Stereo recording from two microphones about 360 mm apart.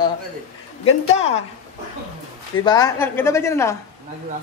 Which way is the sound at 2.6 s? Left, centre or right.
Centre.